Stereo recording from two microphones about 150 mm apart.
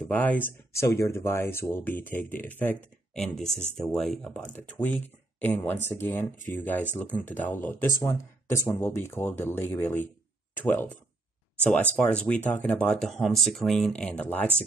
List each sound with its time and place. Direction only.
0.1 s speech: 10° left (ahead or behind)